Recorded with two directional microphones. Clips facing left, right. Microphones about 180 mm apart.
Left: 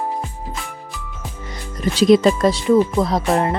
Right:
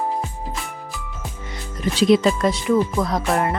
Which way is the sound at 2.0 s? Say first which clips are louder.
Left 3 dB; 40° left (ahead or behind).